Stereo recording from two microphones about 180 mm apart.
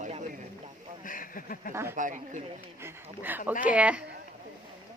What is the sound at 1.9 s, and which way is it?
Speech, 45° right (ahead or behind).